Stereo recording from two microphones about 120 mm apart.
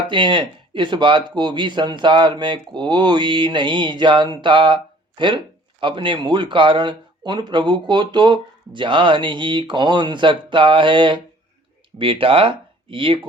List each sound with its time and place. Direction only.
0.1 s speech: 40° right (ahead or behind)